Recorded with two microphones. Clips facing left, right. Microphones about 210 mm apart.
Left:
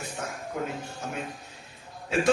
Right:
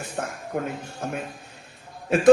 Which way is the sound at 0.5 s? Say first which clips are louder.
Right 4 dB; 55° right (ahead or behind).